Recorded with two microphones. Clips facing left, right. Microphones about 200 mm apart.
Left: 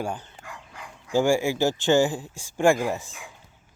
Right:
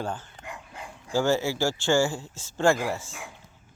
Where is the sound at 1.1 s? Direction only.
15° left (ahead or behind).